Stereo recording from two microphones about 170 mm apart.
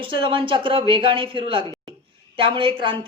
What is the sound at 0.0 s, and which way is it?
Speech, 30° right (ahead or behind).